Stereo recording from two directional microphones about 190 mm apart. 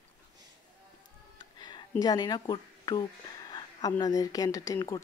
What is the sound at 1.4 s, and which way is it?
Speech, 20° left (ahead or behind).